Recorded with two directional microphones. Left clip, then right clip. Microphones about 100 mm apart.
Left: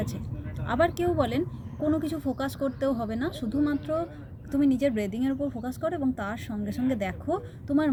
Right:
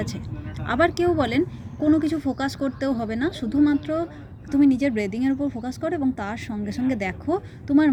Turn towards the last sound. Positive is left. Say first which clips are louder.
# right 6 dB
turn(degrees=25)  # may be behind; listen again after turning